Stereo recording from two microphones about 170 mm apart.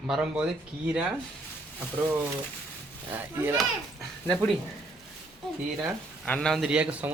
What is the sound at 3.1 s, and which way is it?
Speech, 10° right (ahead or behind).